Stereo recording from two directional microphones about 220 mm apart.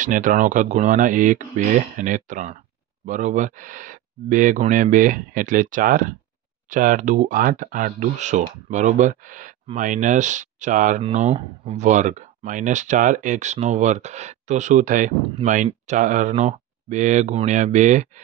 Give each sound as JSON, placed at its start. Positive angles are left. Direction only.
{"t": 0.0, "sound": "speech", "side_deg": -35}